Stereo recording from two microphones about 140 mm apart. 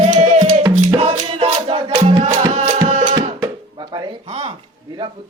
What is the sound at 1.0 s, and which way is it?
Music, 45° right (ahead or behind).